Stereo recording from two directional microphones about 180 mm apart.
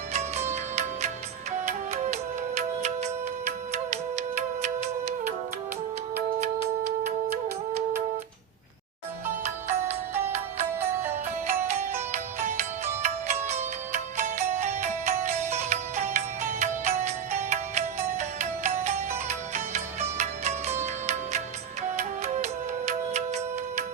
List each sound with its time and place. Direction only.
0.1 s music: 40° right (ahead or behind)
3.4 s music: 40° right (ahead or behind)
10.8 s music: 15° right (ahead or behind)
11.7 s music: 40° right (ahead or behind)